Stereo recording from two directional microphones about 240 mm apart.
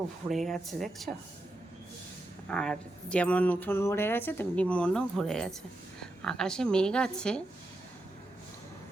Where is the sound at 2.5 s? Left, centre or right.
Centre.